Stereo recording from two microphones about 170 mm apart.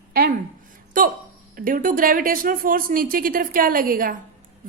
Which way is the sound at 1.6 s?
55° right (ahead or behind).